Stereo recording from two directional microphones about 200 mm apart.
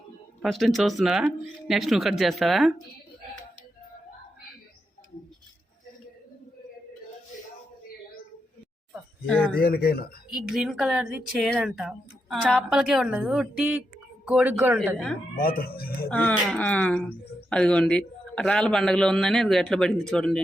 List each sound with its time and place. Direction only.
0.4 s a woman's voice: centre (ahead or behind)
8.9 s a sound: 5° left (ahead or behind)
9.6 s speech: 50° left (ahead or behind)
10.2 s a woman's voice: centre (ahead or behind)
15.4 s speech: 50° left (ahead or behind)
16.0 s a woman's voice: 10° left (ahead or behind)